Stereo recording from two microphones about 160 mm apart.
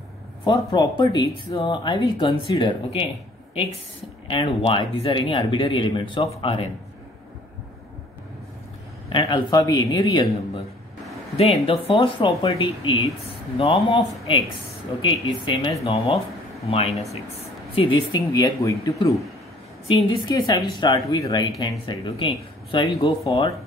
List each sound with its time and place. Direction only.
0.5 s speech: 25° left (ahead or behind)
4.3 s speech: 35° left (ahead or behind)
9.1 s speech: 25° left (ahead or behind)
11.3 s speech: 40° left (ahead or behind); by 19.1 s 20° left (ahead or behind)
20.2 s speech: 25° left (ahead or behind)